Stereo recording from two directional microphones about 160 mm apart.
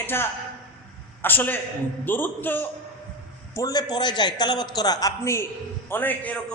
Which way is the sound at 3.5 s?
25° left (ahead or behind).